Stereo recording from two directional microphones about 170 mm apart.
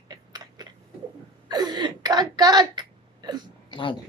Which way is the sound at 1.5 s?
25° right (ahead or behind).